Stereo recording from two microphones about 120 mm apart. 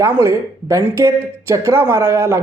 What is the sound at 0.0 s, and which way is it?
Speech, 20° right (ahead or behind).